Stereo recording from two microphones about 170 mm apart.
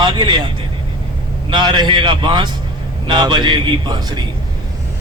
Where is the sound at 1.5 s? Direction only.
25° right (ahead or behind).